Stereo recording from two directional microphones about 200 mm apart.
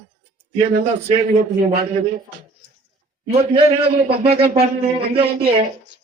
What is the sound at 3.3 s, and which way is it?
A man's voice, 30° right (ahead or behind).